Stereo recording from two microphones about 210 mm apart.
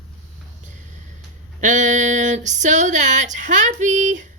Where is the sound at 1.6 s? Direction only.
35° right (ahead or behind).